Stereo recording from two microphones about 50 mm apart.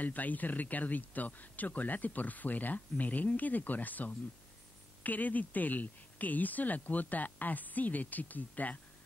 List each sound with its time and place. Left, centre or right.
0.0 s speech: left